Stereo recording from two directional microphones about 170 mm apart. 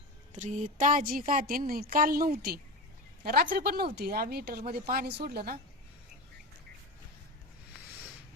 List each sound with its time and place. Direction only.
0.3 s speech: 45° right (ahead or behind); by 5.5 s 65° right (ahead or behind)